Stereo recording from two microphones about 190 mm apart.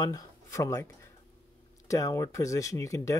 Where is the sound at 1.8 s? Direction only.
15° left (ahead or behind).